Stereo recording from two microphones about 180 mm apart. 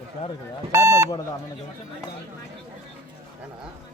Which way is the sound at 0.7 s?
15° right (ahead or behind).